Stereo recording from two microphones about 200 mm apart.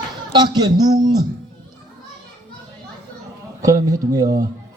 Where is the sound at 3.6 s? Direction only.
15° right (ahead or behind).